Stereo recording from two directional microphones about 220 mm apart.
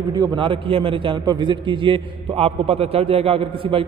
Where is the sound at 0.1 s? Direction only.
20° right (ahead or behind).